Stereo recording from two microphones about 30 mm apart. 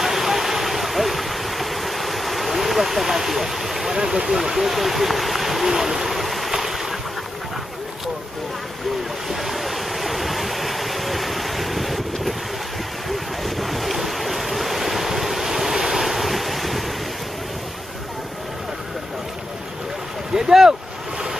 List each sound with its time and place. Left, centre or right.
0.0 s vehicle: centre
3.9 s speech: centre
4.3 s speech: centre
5.7 s hoot: centre
6.5 s boat: centre
9.3 s stream: centre
13.4 s waves: centre
20.3 s boat: centre